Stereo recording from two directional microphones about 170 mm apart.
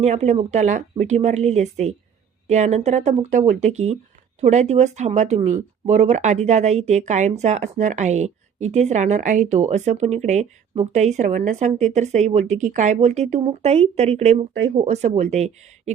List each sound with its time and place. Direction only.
0.0 s speech: 40° right (ahead or behind)